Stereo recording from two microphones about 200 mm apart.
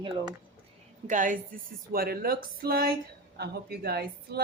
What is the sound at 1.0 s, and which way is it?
Speech, 40° right (ahead or behind).